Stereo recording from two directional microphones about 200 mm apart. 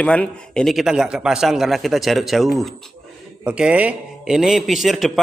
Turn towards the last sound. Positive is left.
turn(degrees=0)  # may be behind; listen again after turning